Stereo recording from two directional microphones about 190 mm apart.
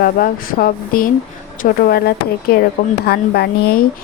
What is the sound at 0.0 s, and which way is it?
A woman's voice, 50° left (ahead or behind).